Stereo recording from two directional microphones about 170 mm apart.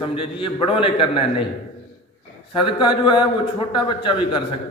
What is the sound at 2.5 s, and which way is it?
A man's voice, 30° left (ahead or behind).